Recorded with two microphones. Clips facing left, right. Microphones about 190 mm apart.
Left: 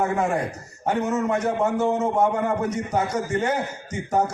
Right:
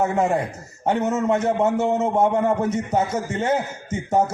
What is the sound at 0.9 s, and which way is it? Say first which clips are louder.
A man's voice: right 2 dB; 25° right (ahead or behind).